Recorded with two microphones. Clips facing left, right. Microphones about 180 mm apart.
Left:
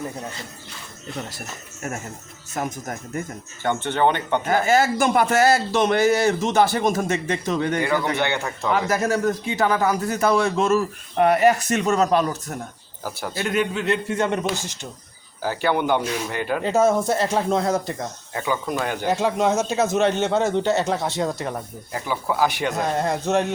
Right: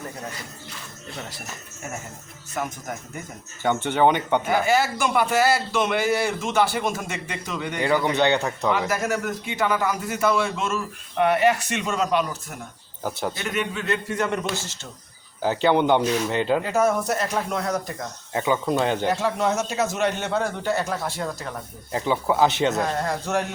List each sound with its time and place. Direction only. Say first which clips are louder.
2.6 s a man's voice: left 2 dB; 40° left (ahead or behind)
3.6 s speech: right 1 dB; 15° right (ahead or behind)
4.6 s a man's voice: left 3 dB; 45° left (ahead or behind)
7.9 s speech: right 2 dB; 15° right (ahead or behind)
9.1 s a man's voice: left 5 dB; 35° left (ahead or behind)
13.0 s speech: right 3 dB; 20° right (ahead or behind)
13.8 s a man's voice: left 3 dB; 25° left (ahead or behind)
15.4 s speech: right 2 dB; 20° right (ahead or behind)
16.6 s a man's voice: left 3 dB; 25° left (ahead or behind)
18.3 s speech: right 3 dB; 20° right (ahead or behind)
19.0 s a man's voice: left 2 dB; 20° left (ahead or behind)
21.9 s speech: right 2 dB; 20° right (ahead or behind)
22.7 s a man's voice: left 2 dB; 20° left (ahead or behind)